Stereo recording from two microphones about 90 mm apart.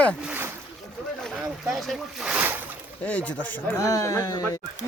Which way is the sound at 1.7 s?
Centre (ahead or behind).